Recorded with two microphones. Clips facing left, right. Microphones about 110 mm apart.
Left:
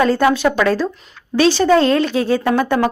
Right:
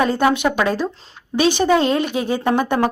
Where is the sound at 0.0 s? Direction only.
15° right (ahead or behind).